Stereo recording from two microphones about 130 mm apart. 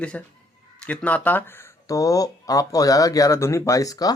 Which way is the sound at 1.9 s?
25° left (ahead or behind).